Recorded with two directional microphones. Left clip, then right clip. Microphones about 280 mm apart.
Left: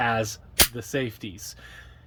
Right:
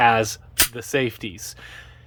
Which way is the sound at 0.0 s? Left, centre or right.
Centre.